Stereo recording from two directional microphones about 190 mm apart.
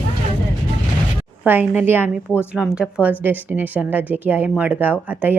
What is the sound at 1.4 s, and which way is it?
A woman's voice, 10° right (ahead or behind).